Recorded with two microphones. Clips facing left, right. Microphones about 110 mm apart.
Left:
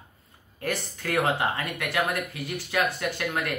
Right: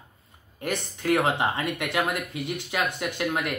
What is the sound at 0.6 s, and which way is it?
Speech, 20° right (ahead or behind).